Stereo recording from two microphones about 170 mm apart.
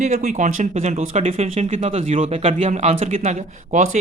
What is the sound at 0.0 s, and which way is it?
Speech, 45° right (ahead or behind).